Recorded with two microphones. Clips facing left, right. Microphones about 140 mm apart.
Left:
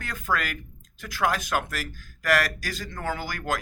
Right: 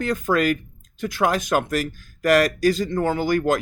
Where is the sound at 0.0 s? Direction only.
25° right (ahead or behind).